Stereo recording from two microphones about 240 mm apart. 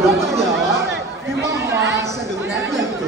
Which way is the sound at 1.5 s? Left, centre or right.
Centre.